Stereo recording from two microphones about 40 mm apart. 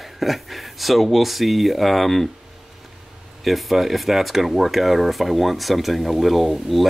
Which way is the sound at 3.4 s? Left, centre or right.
Centre.